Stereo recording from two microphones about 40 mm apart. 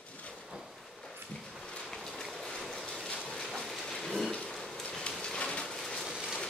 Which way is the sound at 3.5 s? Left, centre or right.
Centre.